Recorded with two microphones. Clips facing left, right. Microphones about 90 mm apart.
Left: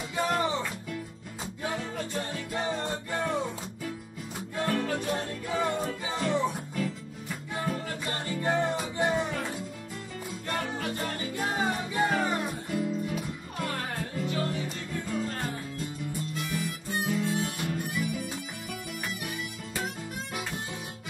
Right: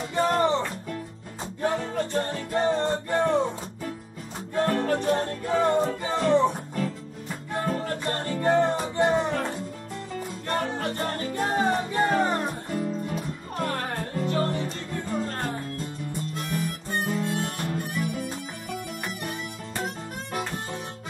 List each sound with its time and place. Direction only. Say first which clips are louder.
0.1 s music: right 6 dB; 45° right (ahead or behind)
4.6 s music: right 5 dB; 45° right (ahead or behind)
10.5 s music: right 5 dB; 45° right (ahead or behind)
16.3 s harmonica: right 5 dB; 50° right (ahead or behind)